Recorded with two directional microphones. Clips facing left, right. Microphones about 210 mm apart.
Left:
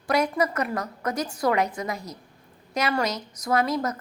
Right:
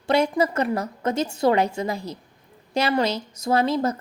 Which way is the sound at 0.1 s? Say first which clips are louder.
Right 3 dB; 25° right (ahead or behind).